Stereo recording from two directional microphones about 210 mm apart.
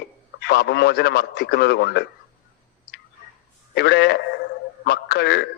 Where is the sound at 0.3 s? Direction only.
50° left (ahead or behind).